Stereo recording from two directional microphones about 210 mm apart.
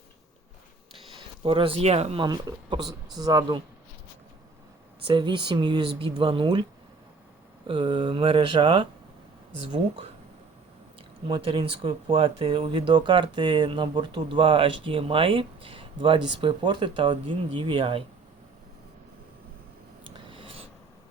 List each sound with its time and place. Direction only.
1.5 s speech: 25° right (ahead or behind)
5.0 s speech: 20° right (ahead or behind)
7.7 s speech: 25° right (ahead or behind)
11.3 s speech: 25° right (ahead or behind)
20.1 s filing: 25° right (ahead or behind)